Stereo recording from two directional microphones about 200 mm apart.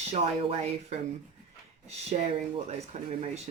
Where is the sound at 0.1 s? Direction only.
35° right (ahead or behind).